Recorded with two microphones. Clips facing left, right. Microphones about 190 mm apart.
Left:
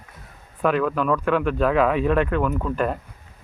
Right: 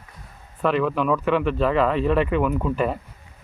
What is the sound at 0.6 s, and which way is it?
Speech, centre (ahead or behind).